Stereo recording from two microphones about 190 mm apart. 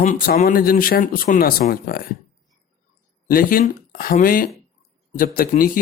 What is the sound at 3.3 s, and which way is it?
A man's voice, 50° left (ahead or behind).